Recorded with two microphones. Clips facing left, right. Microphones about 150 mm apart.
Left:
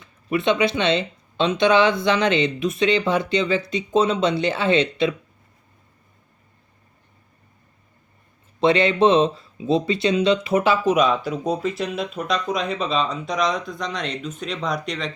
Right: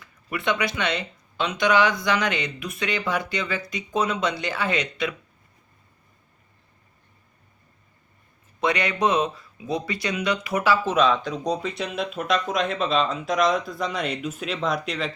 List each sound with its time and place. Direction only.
0.0 s speech: 20° left (ahead or behind)
8.6 s speech: 25° left (ahead or behind); by 15.1 s centre (ahead or behind)